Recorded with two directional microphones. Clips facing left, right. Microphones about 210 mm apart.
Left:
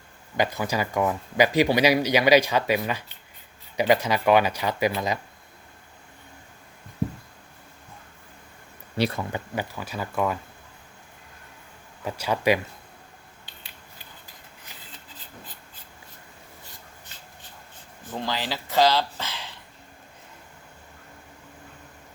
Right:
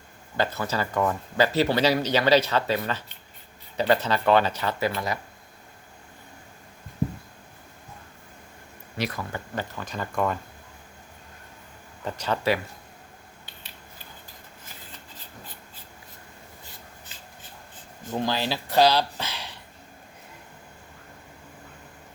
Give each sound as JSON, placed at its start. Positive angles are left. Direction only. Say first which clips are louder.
{"t": 0.3, "sound": "speech", "louder": "left 2 dB", "side_deg": 15}
{"t": 9.0, "sound": "speech", "louder": "left 5 dB", "side_deg": 30}
{"t": 9.3, "sound": "speech", "louder": "left 2 dB", "side_deg": 10}
{"t": 12.0, "sound": "speech", "louder": "left 2 dB", "side_deg": 10}
{"t": 18.1, "sound": "speech", "louder": "right 3 dB", "side_deg": -15}